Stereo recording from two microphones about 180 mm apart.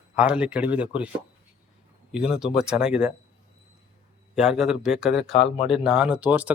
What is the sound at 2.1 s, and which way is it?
A man's voice, 5° right (ahead or behind).